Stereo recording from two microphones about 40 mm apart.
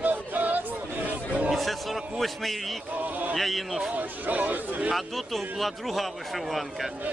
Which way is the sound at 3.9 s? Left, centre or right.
Right.